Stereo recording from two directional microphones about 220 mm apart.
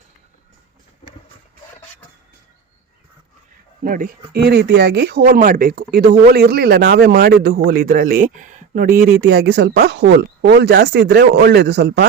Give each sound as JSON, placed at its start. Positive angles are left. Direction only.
{"t": 3.8, "sound": "speech", "side_deg": -40}